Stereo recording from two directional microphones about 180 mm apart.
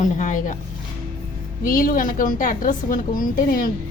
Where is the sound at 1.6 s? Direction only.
50° left (ahead or behind).